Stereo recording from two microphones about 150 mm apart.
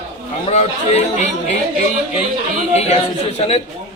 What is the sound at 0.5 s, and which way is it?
Speech, 50° left (ahead or behind).